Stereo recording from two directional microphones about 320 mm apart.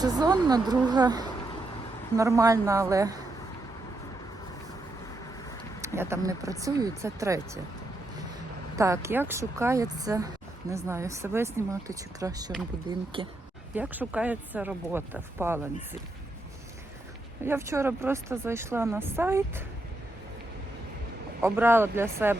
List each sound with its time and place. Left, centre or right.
0.0 s speech: centre
5.8 s speech: centre
8.7 s speech: centre
13.7 s speech: centre
17.4 s speech: centre
21.4 s speech: centre